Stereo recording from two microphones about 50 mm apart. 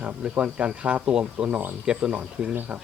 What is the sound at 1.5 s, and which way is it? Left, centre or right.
Speech, right.